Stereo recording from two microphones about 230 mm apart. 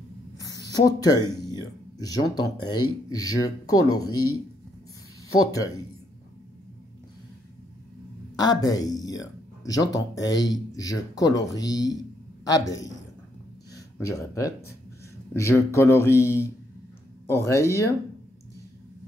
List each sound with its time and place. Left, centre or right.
0.4 s a sound: centre
2.6 s speech: centre
5.3 s speech: centre
8.4 s speech: centre
13.7 s speech: centre